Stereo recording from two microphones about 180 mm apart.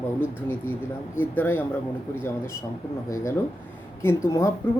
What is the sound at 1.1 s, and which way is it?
Speech, 10° left (ahead or behind).